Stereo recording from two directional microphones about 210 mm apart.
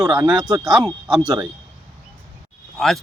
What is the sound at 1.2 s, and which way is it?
Speech, 15° right (ahead or behind).